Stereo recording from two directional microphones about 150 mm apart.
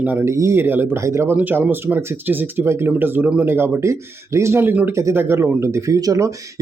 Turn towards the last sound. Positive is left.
turn(degrees=-25)  # may be behind; listen again after turning